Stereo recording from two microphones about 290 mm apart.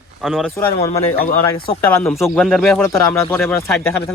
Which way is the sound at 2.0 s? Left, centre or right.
Centre.